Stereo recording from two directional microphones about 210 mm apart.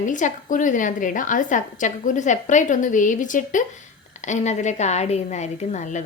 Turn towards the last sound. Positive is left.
turn(degrees=35)  # may be behind; listen again after turning